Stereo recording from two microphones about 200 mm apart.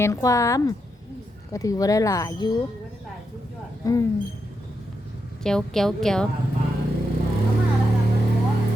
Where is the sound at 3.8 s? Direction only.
15° left (ahead or behind).